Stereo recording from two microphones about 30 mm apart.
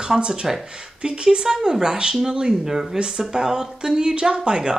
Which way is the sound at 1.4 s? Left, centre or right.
Centre.